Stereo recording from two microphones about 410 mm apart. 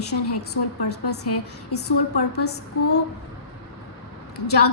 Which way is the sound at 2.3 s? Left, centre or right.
Left.